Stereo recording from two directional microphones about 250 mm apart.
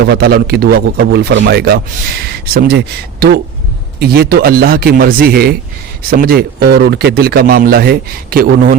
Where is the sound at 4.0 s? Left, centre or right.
Right.